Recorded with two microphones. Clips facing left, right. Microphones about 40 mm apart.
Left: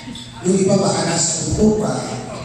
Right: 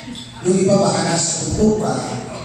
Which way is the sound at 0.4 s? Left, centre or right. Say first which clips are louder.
Right 1 dB; centre.